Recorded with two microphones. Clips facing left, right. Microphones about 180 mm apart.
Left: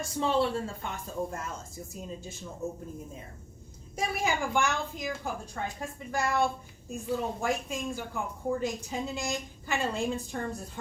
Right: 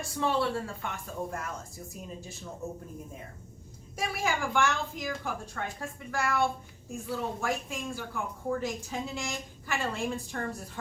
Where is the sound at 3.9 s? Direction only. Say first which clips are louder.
Left 1 dB; 20° left (ahead or behind).